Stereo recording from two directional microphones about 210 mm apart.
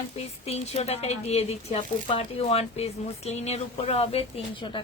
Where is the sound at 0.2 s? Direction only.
30° left (ahead or behind).